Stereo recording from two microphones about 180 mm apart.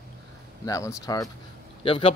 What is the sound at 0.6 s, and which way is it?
Speech, 15° left (ahead or behind).